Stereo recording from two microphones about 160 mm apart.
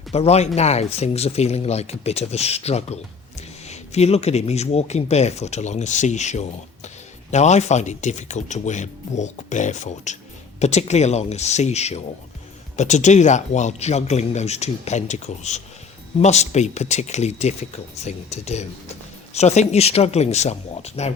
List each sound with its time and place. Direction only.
0.1 s speech: 40° left (ahead or behind)